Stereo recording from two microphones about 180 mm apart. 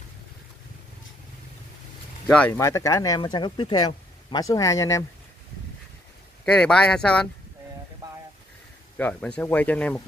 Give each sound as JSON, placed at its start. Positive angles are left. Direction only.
{"t": 2.2, "sound": "speech", "side_deg": 5}
{"t": 6.4, "sound": "speech", "side_deg": 5}
{"t": 8.9, "sound": "speech", "side_deg": 10}